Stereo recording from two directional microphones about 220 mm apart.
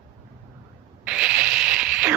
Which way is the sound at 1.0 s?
5° right (ahead or behind).